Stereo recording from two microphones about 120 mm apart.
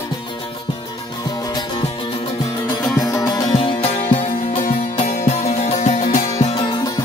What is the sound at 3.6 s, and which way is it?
Music, 55° left (ahead or behind).